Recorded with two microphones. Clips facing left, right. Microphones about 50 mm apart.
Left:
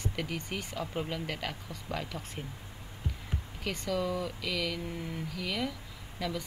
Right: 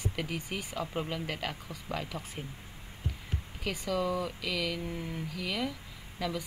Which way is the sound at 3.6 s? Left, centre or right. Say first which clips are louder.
Right 1 dB; centre.